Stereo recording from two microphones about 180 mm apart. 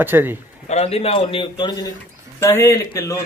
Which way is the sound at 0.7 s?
35° left (ahead or behind).